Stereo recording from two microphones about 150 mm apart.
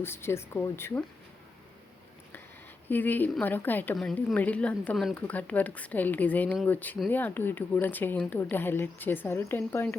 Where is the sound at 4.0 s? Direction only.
Centre (ahead or behind).